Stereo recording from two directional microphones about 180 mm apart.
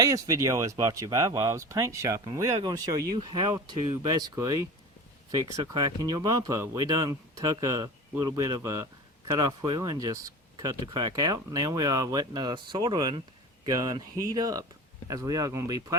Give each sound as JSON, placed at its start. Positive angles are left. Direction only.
{"t": 0.0, "sound": "speech", "side_deg": -20}